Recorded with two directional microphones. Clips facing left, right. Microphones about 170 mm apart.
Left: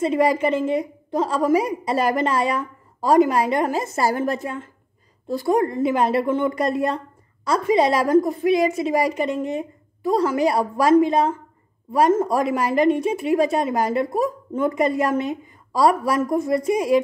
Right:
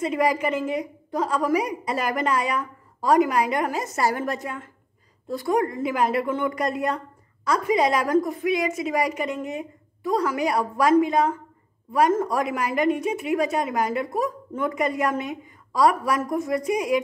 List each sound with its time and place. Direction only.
0.0 s a woman's voice: 30° left (ahead or behind)